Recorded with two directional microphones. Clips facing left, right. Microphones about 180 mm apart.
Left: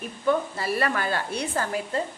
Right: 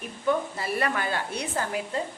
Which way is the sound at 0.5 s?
20° right (ahead or behind).